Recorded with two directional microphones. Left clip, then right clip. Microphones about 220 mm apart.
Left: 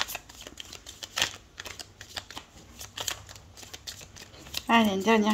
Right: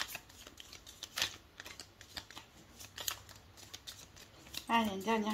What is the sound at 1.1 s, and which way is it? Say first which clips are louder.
Typewriter: left 8 dB; 20° left (ahead or behind).